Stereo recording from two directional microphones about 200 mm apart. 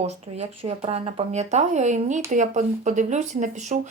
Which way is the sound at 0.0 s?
30° right (ahead or behind).